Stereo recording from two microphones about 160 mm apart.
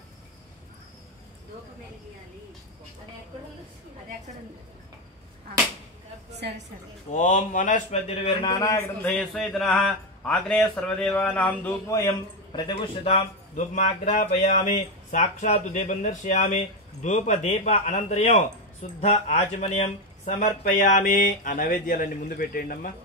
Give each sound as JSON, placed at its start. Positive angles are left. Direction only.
{"t": 7.1, "sound": "a man's voice", "side_deg": 55}
{"t": 9.0, "sound": "a man's voice", "side_deg": 5}
{"t": 11.9, "sound": "a man's voice", "side_deg": 20}